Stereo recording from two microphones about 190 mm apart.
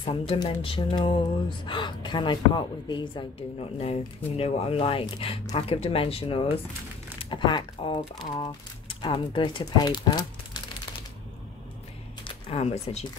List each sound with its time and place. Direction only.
0.3 s speech: 30° left (ahead or behind)
12.3 s speech: 30° left (ahead or behind)